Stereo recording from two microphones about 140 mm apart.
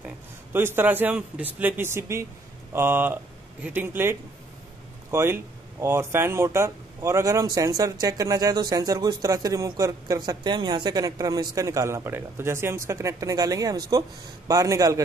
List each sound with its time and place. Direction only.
0.5 s a man's voice: 15° right (ahead or behind)